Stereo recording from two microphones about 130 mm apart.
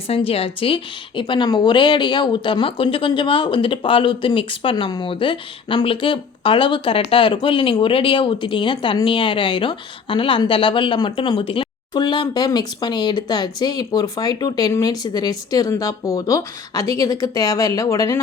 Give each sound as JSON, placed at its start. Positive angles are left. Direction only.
{"t": 0.1, "sound": "speech", "side_deg": 50}